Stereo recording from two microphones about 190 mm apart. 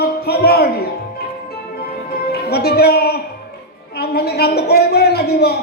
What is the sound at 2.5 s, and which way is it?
A man's voice, 55° left (ahead or behind).